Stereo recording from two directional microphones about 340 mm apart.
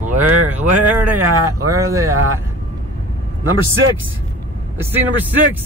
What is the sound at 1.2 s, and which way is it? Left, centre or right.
Speech, right.